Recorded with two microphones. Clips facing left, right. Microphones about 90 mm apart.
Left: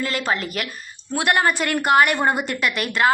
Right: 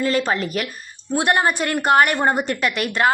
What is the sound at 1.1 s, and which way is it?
A woman's voice, 30° right (ahead or behind).